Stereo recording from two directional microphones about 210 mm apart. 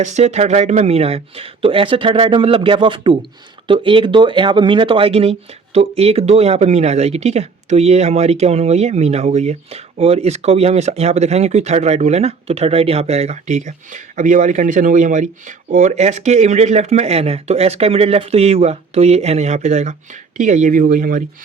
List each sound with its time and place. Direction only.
0.0 s speech: 35° right (ahead or behind)